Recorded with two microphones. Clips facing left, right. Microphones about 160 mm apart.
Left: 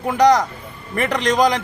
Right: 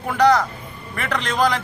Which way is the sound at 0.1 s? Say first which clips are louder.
Left 2 dB; 15° left (ahead or behind).